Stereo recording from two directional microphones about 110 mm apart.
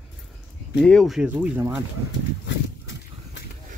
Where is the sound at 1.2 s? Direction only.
15° right (ahead or behind).